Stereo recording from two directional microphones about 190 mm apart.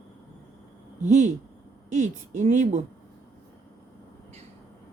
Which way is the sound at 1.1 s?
40° right (ahead or behind).